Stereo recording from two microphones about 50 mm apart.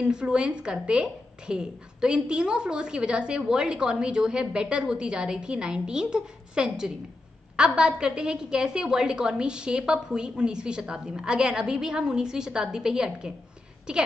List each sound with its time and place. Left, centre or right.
0.0 s a woman's voice: centre